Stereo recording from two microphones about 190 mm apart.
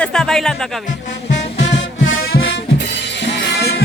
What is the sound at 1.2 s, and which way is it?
Music, 70° left (ahead or behind).